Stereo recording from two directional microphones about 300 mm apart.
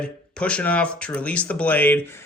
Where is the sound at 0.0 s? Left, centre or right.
Centre.